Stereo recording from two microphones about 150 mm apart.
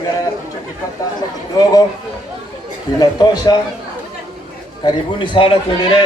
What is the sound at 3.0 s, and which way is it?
Speech, 25° left (ahead or behind).